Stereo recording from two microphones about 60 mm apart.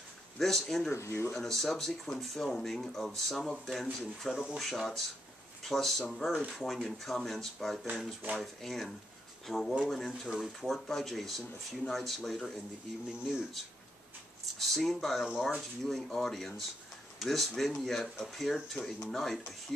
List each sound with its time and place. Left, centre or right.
0.4 s speech: centre
0.9 s speech: left
1.3 s speech: centre
14.6 s speech: centre